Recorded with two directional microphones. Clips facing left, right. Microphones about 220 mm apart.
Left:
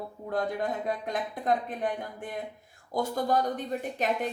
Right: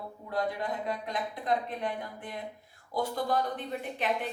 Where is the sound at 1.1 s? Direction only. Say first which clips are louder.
Left 2 dB; 50° left (ahead or behind).